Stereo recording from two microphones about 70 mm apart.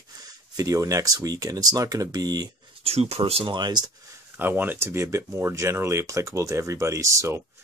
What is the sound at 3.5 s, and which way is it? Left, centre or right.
Speech, right.